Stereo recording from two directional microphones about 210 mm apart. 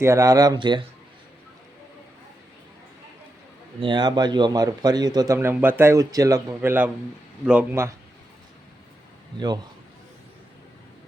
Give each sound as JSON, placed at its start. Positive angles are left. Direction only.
{"t": 0.0, "sound": "a man's voice", "side_deg": -15}
{"t": 3.8, "sound": "a man's voice", "side_deg": -20}